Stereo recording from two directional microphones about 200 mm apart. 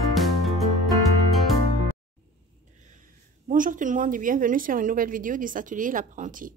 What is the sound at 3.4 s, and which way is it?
A woman's voice, 40° right (ahead or behind).